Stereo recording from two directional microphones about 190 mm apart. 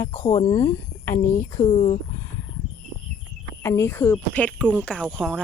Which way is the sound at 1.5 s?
30° left (ahead or behind).